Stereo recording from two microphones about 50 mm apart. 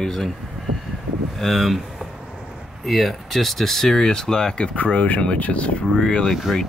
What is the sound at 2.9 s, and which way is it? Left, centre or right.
Speech, centre.